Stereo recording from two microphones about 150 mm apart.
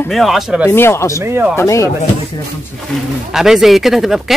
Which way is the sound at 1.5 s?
20° left (ahead or behind).